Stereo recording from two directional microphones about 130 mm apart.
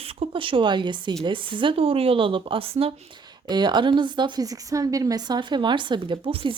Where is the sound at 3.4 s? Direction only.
35° right (ahead or behind).